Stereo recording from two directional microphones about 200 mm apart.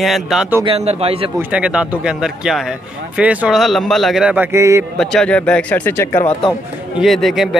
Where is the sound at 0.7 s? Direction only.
30° right (ahead or behind).